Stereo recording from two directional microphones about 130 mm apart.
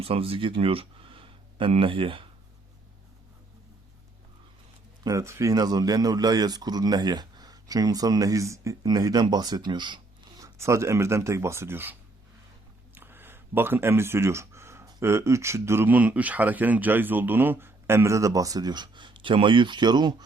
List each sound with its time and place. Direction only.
0.0 s speech: 45° right (ahead or behind)
5.0 s speech: 20° right (ahead or behind)
12.9 s a sound: 15° right (ahead or behind)
14.8 s speech: 25° right (ahead or behind)